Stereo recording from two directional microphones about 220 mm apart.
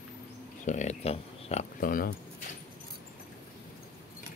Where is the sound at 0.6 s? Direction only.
35° left (ahead or behind).